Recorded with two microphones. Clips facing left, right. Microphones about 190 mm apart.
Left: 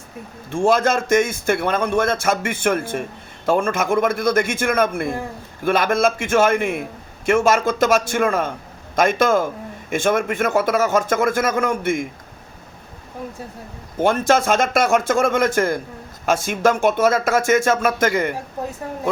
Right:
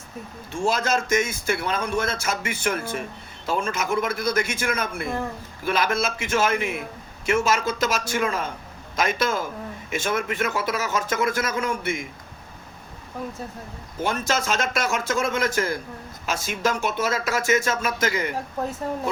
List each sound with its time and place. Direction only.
0.5 s a man's voice: 55° left (ahead or behind)
14.0 s a man's voice: 55° left (ahead or behind)